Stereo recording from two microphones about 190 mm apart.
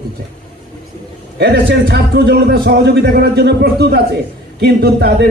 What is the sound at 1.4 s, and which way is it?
A man's voice, 60° right (ahead or behind).